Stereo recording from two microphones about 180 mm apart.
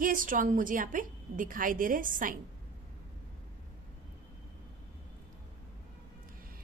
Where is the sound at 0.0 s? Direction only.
50° right (ahead or behind).